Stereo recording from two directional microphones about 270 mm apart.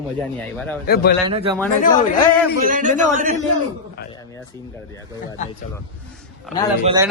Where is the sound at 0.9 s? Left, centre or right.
Left.